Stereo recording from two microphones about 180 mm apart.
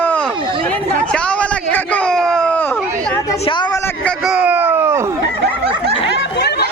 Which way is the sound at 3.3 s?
25° left (ahead or behind).